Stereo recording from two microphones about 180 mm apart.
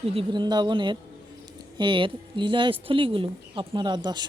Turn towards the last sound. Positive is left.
turn(degrees=-25)  # may be behind; listen again after turning